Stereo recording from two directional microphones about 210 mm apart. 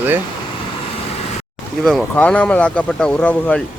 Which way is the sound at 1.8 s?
5° left (ahead or behind).